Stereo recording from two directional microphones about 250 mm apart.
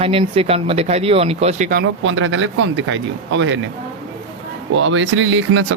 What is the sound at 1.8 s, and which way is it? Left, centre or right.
Speech, right.